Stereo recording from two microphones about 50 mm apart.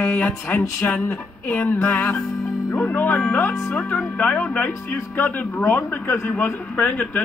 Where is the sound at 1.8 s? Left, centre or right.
Left.